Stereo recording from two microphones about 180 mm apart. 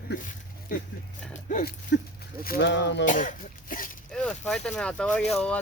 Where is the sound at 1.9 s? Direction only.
75° left (ahead or behind).